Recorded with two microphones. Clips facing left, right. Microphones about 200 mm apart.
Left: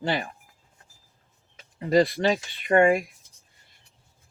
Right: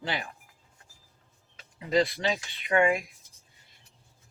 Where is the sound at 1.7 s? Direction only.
50° left (ahead or behind).